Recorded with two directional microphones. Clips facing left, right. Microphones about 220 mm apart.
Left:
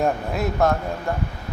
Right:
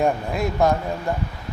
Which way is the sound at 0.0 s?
Centre (ahead or behind).